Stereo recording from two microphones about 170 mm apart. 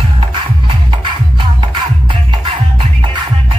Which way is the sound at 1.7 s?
30° right (ahead or behind).